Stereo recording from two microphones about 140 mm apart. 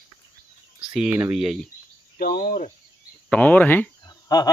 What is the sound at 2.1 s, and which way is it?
Cricket, 90° left.